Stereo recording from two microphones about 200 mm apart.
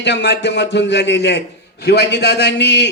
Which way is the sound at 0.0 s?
60° left (ahead or behind).